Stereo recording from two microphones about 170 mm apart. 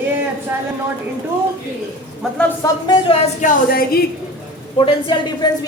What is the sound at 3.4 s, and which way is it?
Speech, 60° left (ahead or behind).